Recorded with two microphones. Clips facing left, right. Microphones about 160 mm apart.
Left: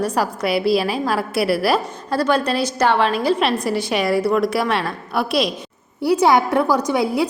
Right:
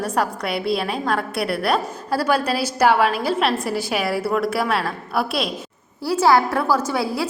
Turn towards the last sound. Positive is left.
turn(degrees=20)  # may be behind; listen again after turning